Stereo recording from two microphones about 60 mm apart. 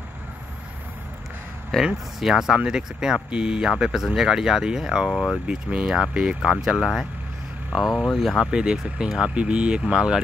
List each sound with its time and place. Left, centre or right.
1.7 s speech: centre
2.1 s speech: centre
5.1 s speech: centre
5.5 s speech: centre
8.5 s speech: centre